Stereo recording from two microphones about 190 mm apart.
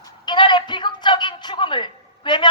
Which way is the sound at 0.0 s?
25° left (ahead or behind).